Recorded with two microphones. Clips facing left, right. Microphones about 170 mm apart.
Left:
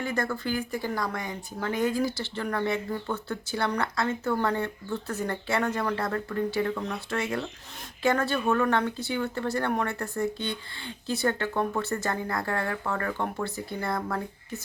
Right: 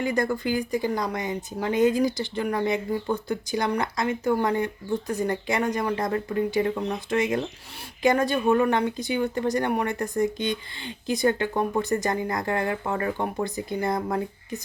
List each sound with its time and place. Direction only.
0.0 s speech: 15° right (ahead or behind)